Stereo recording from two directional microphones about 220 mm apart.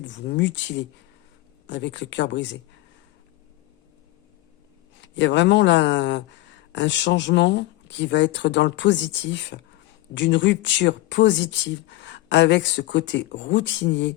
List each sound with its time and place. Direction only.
0.0 s speech: 55° left (ahead or behind)
4.9 s speech: 55° left (ahead or behind)